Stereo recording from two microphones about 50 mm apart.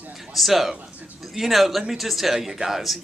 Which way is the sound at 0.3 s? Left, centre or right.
Centre.